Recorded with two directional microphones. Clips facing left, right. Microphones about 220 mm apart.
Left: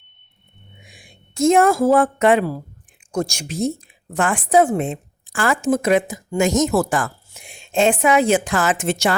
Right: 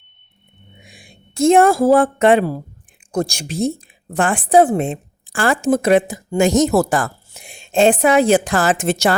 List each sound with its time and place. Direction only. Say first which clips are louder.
0.9 s a woman's voice: right 3 dB; 30° right (ahead or behind)